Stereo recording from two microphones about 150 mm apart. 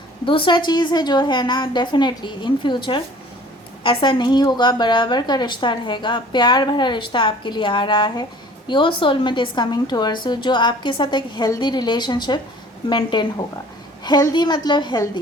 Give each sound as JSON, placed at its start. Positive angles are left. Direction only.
{"t": 0.3, "sound": "a woman's voice", "side_deg": 35}